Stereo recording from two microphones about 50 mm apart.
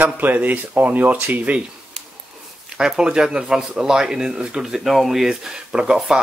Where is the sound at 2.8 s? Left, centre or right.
Centre.